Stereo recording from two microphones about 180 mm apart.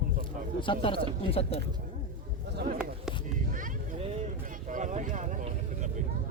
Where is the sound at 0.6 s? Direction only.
30° left (ahead or behind).